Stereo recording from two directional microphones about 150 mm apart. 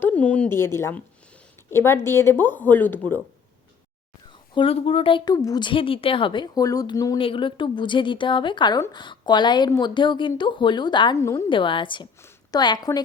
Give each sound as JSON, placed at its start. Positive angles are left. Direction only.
{"t": 0.0, "sound": "speech", "side_deg": 10}
{"t": 4.5, "sound": "a woman's voice", "side_deg": 40}
{"t": 7.2, "sound": "a woman's voice", "side_deg": 35}
{"t": 11.4, "sound": "a woman's voice", "side_deg": 35}